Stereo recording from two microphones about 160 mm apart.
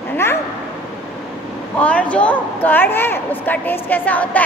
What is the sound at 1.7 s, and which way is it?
A woman's voice, 10° left (ahead or behind).